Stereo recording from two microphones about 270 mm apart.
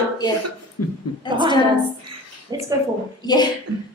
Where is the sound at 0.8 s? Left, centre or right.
Left.